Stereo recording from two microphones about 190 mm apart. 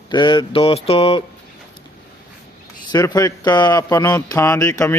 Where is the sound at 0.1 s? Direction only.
25° left (ahead or behind).